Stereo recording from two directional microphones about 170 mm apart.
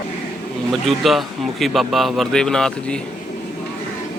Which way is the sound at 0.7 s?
Centre (ahead or behind).